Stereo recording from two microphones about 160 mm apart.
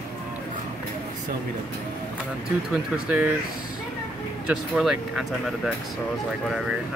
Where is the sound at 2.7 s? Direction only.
10° right (ahead or behind).